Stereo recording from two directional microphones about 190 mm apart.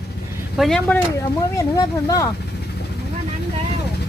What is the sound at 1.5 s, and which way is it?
Speech, 20° left (ahead or behind).